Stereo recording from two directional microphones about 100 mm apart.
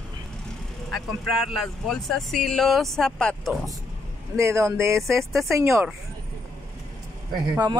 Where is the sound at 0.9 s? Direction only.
Centre (ahead or behind).